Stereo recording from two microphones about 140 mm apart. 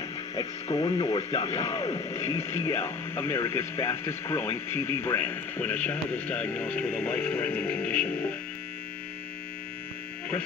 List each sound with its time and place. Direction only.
0.4 s speech: 35° left (ahead or behind)
2.0 s speech: 20° left (ahead or behind)